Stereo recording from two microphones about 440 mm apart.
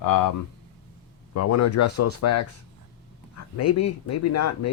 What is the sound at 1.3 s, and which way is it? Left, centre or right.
Speech, left.